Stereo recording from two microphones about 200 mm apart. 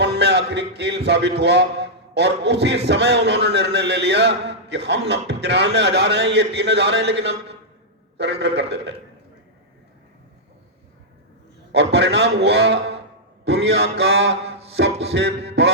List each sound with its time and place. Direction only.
0.0 s a man's voice: 55° right (ahead or behind)
11.7 s a man's voice: 55° right (ahead or behind)
14.4 s a sound: 30° right (ahead or behind)
15.0 s a man's voice: 55° right (ahead or behind)